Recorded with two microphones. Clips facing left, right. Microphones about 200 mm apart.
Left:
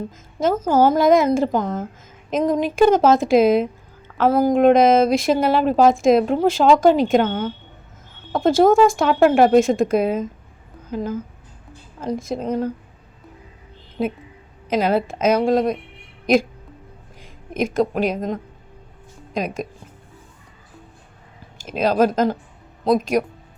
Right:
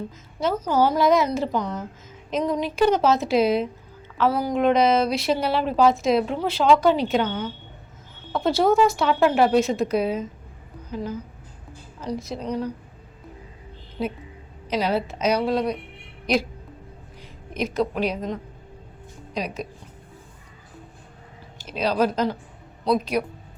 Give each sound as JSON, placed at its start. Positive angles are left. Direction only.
{"t": 0.3, "sound": "a woman's voice", "side_deg": 50}
{"t": 14.0, "sound": "a woman's voice", "side_deg": 50}
{"t": 17.5, "sound": "a woman's voice", "side_deg": 50}
{"t": 21.6, "sound": "a woman's voice", "side_deg": 50}